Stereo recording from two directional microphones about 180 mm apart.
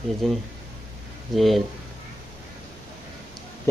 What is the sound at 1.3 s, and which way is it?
Speech, centre (ahead or behind).